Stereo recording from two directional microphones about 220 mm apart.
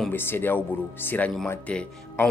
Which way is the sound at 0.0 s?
10° left (ahead or behind).